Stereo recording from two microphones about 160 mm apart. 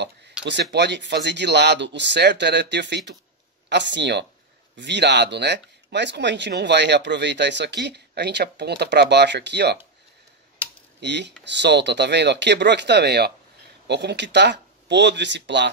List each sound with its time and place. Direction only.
0.4 s speech: 90° right
11.0 s speech: 90° right